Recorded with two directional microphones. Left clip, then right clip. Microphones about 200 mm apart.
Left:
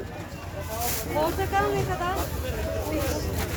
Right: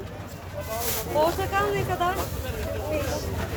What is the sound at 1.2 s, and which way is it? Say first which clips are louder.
Speech: right 4 dB; 55° right (ahead or behind).